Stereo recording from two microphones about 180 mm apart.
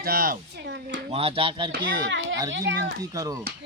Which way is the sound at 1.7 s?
85° right.